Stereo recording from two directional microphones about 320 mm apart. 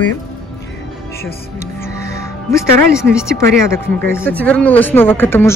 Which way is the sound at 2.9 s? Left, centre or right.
Centre.